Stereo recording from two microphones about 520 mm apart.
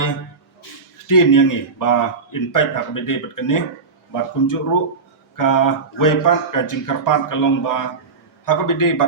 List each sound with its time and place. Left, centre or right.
1.0 s a man's voice: left